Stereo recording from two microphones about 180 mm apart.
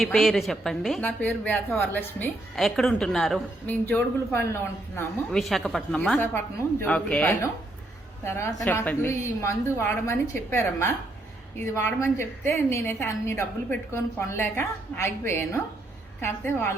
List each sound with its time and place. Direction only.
0.0 s a woman's voice: centre (ahead or behind)
5.3 s a woman's voice: centre (ahead or behind)